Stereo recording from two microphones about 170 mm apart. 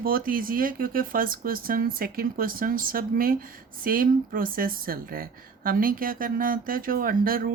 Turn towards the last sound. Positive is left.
turn(degrees=-60)  # may be behind; listen again after turning